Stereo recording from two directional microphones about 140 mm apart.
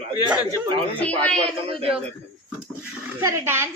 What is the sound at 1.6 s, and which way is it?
Speech, 45° right (ahead or behind).